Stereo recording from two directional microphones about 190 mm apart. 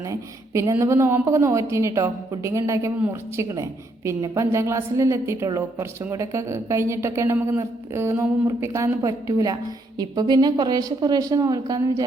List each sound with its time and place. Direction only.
0.1 s a woman's voice: 15° right (ahead or behind)